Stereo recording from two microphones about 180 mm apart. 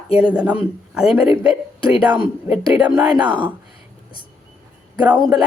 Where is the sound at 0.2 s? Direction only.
5° right (ahead or behind).